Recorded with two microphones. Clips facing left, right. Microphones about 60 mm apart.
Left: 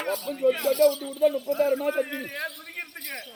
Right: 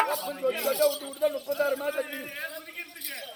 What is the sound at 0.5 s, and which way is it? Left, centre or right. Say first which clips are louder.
Speech: left 3 dB; left.